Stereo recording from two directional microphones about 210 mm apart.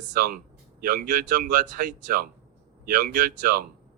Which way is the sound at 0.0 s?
40° right (ahead or behind).